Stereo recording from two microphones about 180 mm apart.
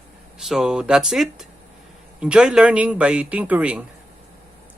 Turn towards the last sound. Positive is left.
turn(degrees=-10)  # may be behind; listen again after turning